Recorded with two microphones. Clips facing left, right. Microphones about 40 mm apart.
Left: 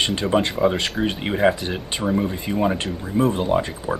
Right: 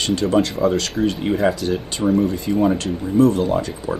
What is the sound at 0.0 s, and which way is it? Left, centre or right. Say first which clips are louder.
Speech: right 2 dB; left.